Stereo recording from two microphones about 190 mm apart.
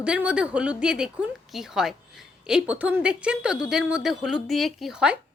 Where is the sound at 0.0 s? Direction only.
5° right (ahead or behind).